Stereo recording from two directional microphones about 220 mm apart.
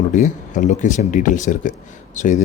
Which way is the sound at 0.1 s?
35° left (ahead or behind).